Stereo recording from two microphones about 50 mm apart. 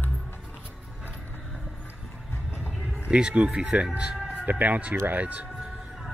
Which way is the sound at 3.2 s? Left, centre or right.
Centre.